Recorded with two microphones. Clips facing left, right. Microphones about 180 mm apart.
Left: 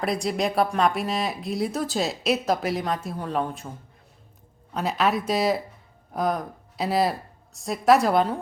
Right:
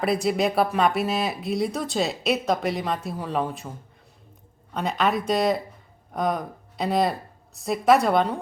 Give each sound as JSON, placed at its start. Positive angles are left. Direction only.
{"t": 0.0, "sound": "a woman's voice", "side_deg": 0}